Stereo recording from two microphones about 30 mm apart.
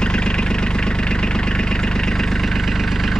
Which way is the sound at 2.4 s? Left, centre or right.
Centre.